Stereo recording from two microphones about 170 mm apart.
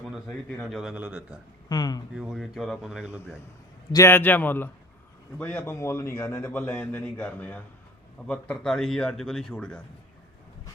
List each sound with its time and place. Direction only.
0.6 s a man's voice: centre (ahead or behind)
1.7 s a sound: 25° left (ahead or behind)
2.1 s a man's voice: centre (ahead or behind)
3.9 s a man's voice: 15° left (ahead or behind)